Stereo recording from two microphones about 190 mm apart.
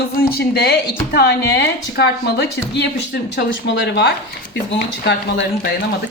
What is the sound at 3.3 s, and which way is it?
Speech, 70° left (ahead or behind).